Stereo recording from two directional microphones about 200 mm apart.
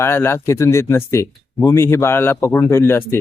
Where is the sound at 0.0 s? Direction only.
15° left (ahead or behind).